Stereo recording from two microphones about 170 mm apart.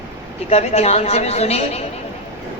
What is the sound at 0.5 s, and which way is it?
A man's voice, 40° left (ahead or behind).